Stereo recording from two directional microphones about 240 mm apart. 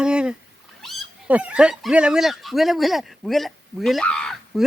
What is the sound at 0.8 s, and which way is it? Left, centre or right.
Speech, centre.